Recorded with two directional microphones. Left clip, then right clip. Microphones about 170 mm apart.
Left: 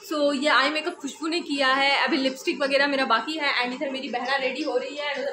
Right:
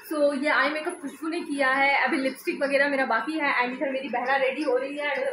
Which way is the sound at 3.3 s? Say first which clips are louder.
Even; 15° right (ahead or behind).